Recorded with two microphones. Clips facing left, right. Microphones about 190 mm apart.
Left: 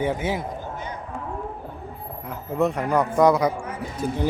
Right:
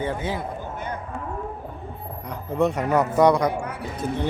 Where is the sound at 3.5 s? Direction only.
65° right (ahead or behind).